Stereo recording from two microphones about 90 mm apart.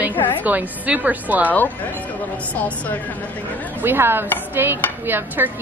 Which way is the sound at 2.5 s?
15° left (ahead or behind).